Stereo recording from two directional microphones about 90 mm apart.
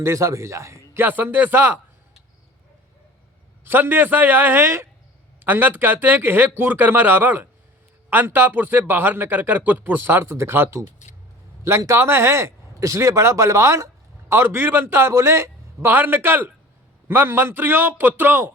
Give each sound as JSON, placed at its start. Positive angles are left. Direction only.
{"t": 0.0, "sound": "speech", "side_deg": -35}
{"t": 1.0, "sound": "a man's voice", "side_deg": -20}
{"t": 3.7, "sound": "a man's voice", "side_deg": -25}